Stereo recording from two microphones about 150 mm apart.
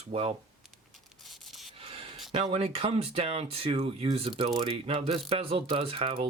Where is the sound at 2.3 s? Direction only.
40° right (ahead or behind).